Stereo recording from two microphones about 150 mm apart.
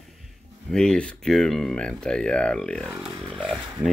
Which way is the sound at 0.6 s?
5° left (ahead or behind).